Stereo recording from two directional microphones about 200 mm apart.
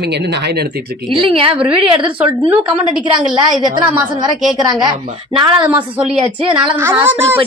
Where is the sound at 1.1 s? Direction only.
25° right (ahead or behind).